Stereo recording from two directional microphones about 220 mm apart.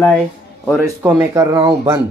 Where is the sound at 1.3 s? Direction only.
20° right (ahead or behind).